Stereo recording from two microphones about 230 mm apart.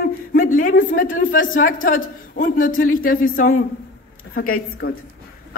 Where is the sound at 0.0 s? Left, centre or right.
Left.